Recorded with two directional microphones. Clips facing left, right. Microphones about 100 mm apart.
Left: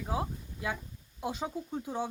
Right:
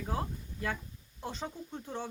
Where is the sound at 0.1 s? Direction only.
10° left (ahead or behind).